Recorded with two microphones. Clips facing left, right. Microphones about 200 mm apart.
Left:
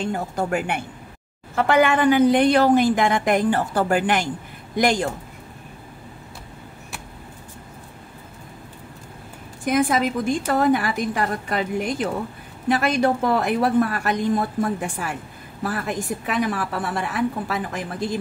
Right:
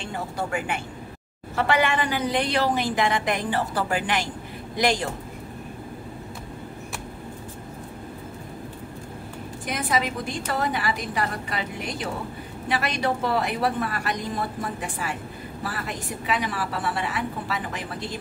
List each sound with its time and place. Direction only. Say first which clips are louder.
0.0 s a woman's voice: left 5 dB; 45° left (ahead or behind)
0.6 s speech: left 3 dB; 65° left (ahead or behind)
1.5 s a woman's voice: left 5 dB; 50° left (ahead or behind)
9.7 s a woman's voice: left 7 dB; 50° left (ahead or behind)